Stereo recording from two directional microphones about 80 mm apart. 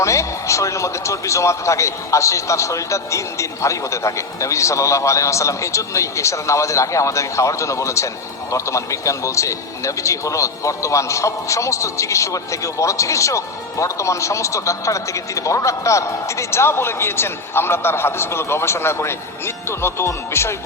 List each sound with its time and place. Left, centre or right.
0.0 s a man's voice: left